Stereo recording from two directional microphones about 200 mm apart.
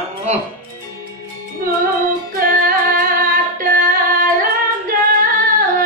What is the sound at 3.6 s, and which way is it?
Singing, 45° right (ahead or behind).